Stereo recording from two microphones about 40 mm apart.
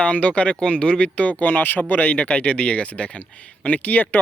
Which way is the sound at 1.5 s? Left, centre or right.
Left.